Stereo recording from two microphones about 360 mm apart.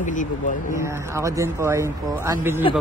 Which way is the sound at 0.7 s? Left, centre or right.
Centre.